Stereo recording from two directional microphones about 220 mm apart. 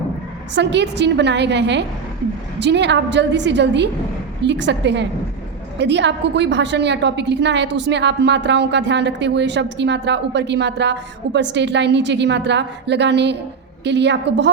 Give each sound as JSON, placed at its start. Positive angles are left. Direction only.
{"t": 0.5, "sound": "a woman's voice", "side_deg": -50}